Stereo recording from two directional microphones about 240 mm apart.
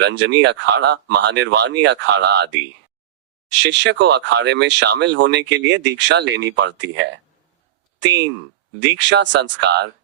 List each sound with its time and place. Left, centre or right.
0.0 s speech: right
3.7 s speech: right